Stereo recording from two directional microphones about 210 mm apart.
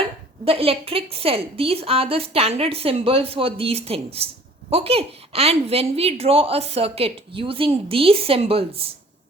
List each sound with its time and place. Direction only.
0.4 s speech: 25° right (ahead or behind)